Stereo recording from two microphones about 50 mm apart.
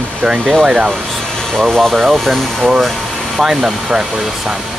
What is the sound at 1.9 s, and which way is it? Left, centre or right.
Speech, centre.